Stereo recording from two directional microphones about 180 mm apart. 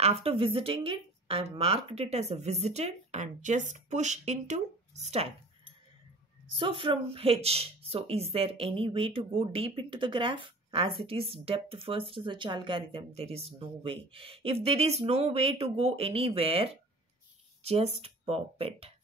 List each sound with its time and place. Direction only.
0.0 s speech: 35° right (ahead or behind)
6.5 s speech: 30° right (ahead or behind)